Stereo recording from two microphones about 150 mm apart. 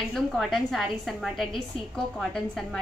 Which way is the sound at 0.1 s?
Centre (ahead or behind).